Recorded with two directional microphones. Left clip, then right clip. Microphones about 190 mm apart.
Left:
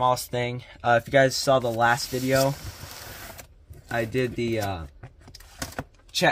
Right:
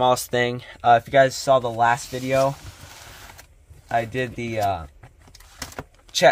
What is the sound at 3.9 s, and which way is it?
Speech, 10° right (ahead or behind).